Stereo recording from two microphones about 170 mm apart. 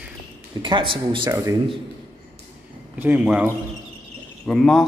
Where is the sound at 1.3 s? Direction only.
20° right (ahead or behind).